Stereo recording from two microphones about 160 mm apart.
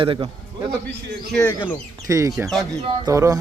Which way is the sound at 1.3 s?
10° left (ahead or behind).